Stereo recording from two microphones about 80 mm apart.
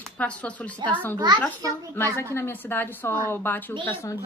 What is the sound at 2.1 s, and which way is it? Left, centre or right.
A woman's voice, left.